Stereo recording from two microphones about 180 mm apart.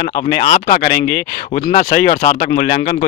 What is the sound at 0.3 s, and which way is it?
Speech, 50° left (ahead or behind).